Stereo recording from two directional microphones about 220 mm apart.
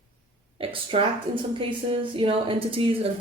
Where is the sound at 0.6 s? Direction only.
25° right (ahead or behind).